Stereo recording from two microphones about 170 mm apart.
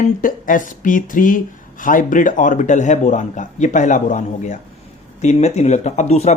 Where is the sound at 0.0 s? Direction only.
55° left (ahead or behind).